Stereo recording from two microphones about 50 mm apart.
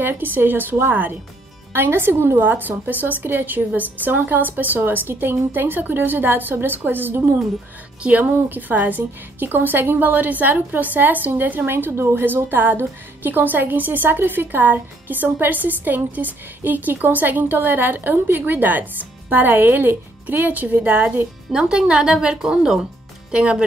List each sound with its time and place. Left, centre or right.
0.0 s a woman's voice: right
8.0 s a woman's voice: right
11.9 s a woman's voice: right
21.5 s speech: centre
23.3 s speech: right